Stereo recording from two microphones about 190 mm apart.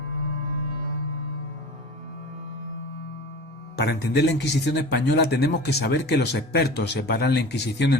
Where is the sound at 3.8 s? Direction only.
60° left (ahead or behind).